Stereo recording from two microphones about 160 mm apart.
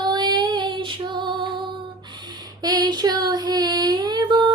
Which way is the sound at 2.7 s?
25° right (ahead or behind).